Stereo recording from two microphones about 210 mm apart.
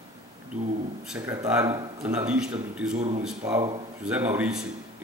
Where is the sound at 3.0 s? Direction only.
30° right (ahead or behind).